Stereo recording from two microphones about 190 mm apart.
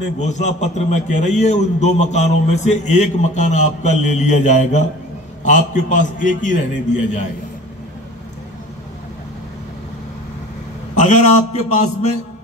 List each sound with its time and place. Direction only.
0.2 s a man's voice: 40° left (ahead or behind)
11.0 s a man's voice: 40° left (ahead or behind)